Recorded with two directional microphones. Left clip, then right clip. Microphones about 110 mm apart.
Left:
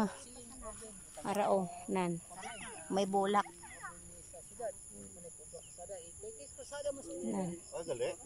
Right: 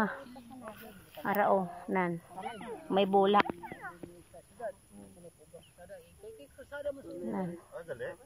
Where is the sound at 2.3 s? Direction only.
55° right (ahead or behind).